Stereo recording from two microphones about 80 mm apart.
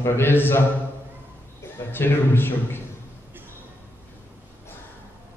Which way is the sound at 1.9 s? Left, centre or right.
Left.